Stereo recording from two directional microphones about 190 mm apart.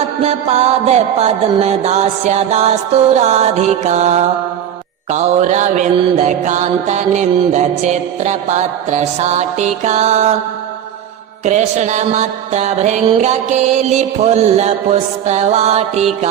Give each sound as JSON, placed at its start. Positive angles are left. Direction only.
{"t": 0.2, "sound": "mantra", "side_deg": -35}
{"t": 11.4, "sound": "mantra", "side_deg": -35}